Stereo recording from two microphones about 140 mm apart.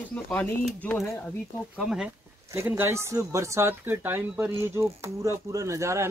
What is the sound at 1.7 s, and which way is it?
Speech, 5° right (ahead or behind).